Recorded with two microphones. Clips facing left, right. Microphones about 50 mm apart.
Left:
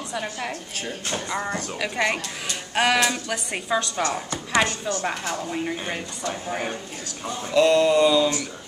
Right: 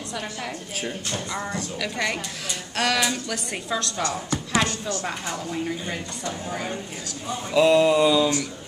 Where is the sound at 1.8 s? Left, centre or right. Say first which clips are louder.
Left 3 dB; centre.